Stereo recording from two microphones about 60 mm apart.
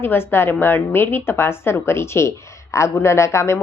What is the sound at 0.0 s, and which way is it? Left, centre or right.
A woman's voice, left.